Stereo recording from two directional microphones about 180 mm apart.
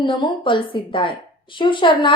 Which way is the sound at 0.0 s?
25° left (ahead or behind).